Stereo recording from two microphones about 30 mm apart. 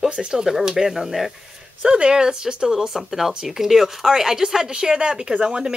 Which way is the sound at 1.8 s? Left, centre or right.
Right.